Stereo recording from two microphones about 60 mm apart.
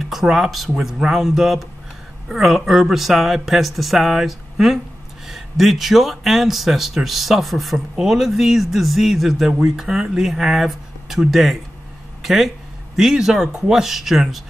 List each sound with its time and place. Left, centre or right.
0.0 s speech: centre
12.2 s a sound: centre
12.9 s speech: centre